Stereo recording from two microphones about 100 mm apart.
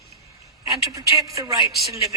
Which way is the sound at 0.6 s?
35° right (ahead or behind).